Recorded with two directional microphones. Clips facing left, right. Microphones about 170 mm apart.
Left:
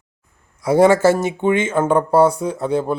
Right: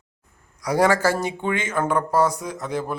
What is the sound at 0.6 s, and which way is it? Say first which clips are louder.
Speech: left 7 dB; 20° left (ahead or behind).